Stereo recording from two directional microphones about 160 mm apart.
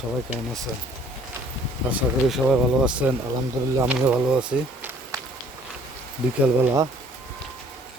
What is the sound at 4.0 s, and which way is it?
Speech, 5° right (ahead or behind).